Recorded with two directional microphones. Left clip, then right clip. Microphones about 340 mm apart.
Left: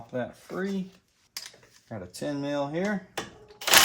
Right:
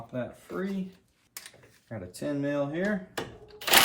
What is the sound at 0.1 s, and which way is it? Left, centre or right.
Speech, left.